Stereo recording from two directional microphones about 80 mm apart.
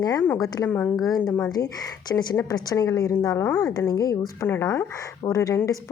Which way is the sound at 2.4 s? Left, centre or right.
Left.